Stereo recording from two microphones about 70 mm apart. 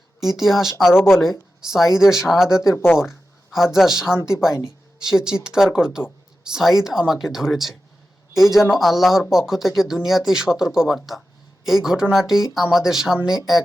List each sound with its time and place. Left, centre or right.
0.2 s speech: centre
2.7 s speech: left
3.1 s speech: centre